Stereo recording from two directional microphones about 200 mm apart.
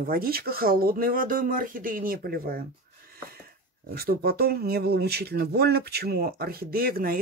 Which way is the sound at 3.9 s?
50° right (ahead or behind).